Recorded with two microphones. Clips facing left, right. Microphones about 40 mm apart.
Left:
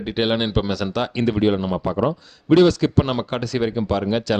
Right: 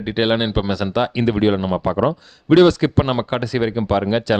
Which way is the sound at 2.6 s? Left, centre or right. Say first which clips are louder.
Right 2 dB; right.